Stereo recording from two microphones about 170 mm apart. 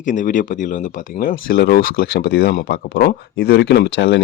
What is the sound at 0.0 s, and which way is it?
Speech, 50° left (ahead or behind).